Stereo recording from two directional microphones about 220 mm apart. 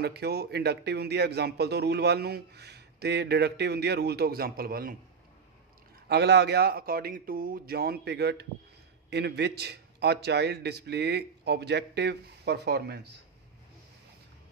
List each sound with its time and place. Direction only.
0.0 s speech: 45° right (ahead or behind)
6.0 s speech: 50° right (ahead or behind)